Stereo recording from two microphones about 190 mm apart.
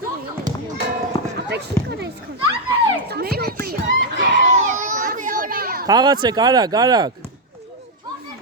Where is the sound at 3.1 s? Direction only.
55° right (ahead or behind).